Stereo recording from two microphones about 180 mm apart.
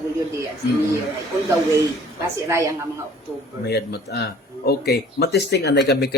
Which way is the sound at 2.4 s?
15° right (ahead or behind).